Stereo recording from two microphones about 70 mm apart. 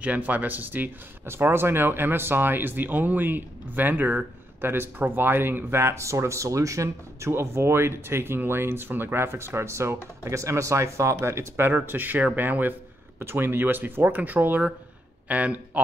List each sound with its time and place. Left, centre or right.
0.0 s speech: right